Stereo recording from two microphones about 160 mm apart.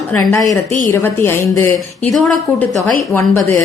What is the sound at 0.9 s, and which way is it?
Speech, 15° left (ahead or behind).